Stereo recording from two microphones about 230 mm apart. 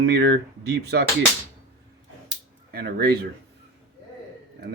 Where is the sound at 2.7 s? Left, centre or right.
Right.